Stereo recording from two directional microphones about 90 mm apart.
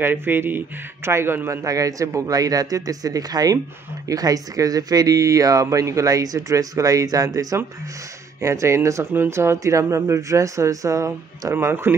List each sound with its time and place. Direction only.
0.0 s speech: 25° right (ahead or behind)
1.5 s speech: 40° right (ahead or behind)
11.5 s speech: 25° right (ahead or behind)